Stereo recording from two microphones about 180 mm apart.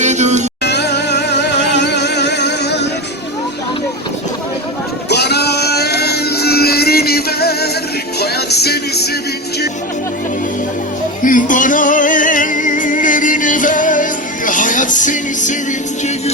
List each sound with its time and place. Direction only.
0.0 s music: 40° right (ahead or behind)
0.6 s music: 70° left (ahead or behind)
5.0 s music: 65° left (ahead or behind)
11.2 s music: 45° left (ahead or behind)